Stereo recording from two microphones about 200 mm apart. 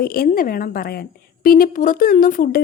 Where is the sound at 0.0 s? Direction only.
50° left (ahead or behind).